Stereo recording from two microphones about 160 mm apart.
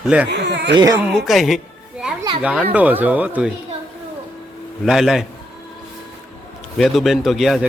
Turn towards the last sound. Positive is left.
turn(degrees=0)  # may be behind; listen again after turning